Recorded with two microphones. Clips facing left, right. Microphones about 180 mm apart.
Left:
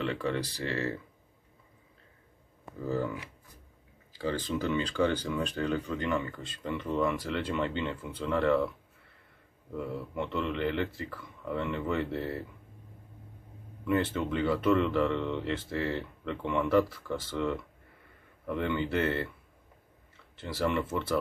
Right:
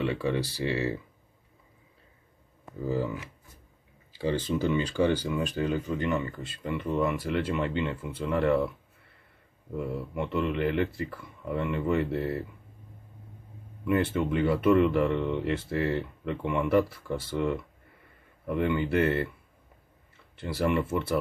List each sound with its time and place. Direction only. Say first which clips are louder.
0.0 s speech: right 3 dB; 25° right (ahead or behind)
4.4 s speech: right 3 dB; 10° right (ahead or behind)
9.8 s speech: right 3 dB; 10° right (ahead or behind)
13.8 s speech: right 3 dB; 10° right (ahead or behind)
20.3 s speech: right 3 dB; 10° right (ahead or behind)